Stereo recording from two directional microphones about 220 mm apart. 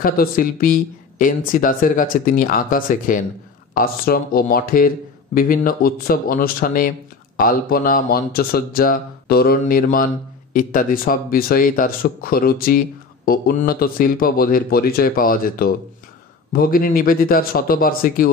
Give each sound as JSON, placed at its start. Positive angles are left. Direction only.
{"t": 0.0, "sound": "speech", "side_deg": 40}